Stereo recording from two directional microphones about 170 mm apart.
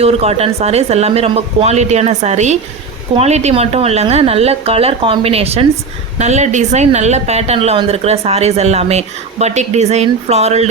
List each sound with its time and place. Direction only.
0.0 s speech: 35° right (ahead or behind)